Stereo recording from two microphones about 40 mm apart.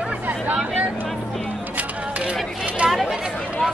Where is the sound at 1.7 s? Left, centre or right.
Right.